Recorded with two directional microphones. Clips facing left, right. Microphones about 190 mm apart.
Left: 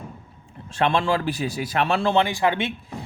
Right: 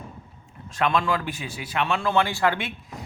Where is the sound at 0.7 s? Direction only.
30° left (ahead or behind).